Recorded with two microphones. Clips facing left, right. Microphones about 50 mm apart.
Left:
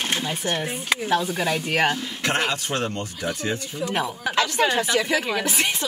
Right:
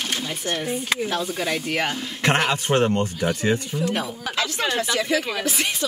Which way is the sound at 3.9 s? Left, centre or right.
Centre.